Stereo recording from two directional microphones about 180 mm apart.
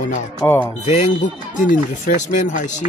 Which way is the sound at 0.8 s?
40° left (ahead or behind).